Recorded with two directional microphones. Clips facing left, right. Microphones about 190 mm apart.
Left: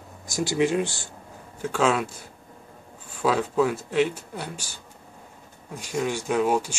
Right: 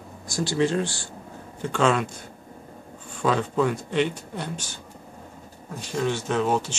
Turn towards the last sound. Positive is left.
turn(degrees=10)  # may be behind; listen again after turning